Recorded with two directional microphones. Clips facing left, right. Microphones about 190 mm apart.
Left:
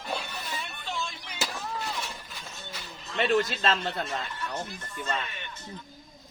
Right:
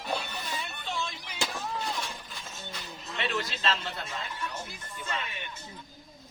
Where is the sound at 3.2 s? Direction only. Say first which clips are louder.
Left 8 dB; 50° left (ahead or behind).